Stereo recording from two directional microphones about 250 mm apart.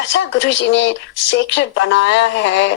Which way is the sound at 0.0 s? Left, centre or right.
Left.